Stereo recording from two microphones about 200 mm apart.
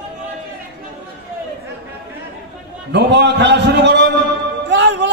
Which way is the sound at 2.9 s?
60° right (ahead or behind).